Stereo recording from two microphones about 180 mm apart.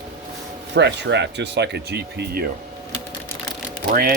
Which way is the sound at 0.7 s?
75° right (ahead or behind).